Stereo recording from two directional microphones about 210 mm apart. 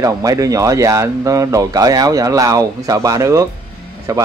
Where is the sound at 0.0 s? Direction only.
15° right (ahead or behind).